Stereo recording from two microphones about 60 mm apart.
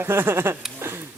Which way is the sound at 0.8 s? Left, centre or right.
Right.